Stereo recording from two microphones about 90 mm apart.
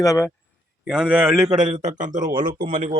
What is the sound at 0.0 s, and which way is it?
Speech, 35° left (ahead or behind).